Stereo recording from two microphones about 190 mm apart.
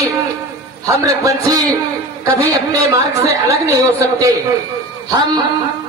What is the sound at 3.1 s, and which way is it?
A woman's voice, 15° right (ahead or behind).